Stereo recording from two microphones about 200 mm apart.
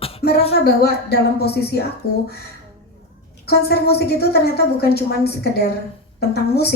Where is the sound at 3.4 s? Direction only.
50° left (ahead or behind).